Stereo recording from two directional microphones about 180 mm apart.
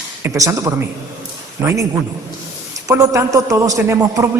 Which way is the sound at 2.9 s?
20° right (ahead or behind).